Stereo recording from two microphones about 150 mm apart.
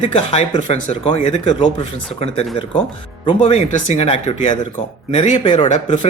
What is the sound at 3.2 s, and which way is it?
Speech, 40° left (ahead or behind).